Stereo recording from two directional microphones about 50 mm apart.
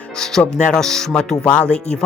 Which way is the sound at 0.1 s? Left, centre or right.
Centre.